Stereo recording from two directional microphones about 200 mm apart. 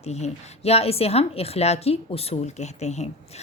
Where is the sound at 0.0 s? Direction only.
35° left (ahead or behind).